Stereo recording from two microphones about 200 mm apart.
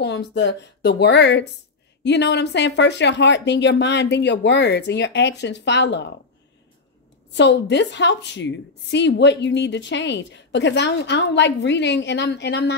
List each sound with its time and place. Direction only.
0.0 s a woman's voice: 60° left (ahead or behind)
7.3 s a woman's voice: 60° left (ahead or behind)